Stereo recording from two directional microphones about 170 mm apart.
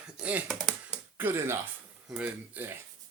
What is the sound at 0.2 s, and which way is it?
Speech, 10° right (ahead or behind).